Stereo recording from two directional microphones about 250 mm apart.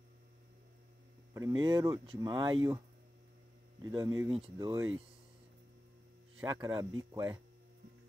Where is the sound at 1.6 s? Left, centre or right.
Centre.